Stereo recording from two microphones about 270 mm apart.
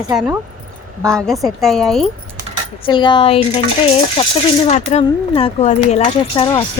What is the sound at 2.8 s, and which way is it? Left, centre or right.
Speech, centre.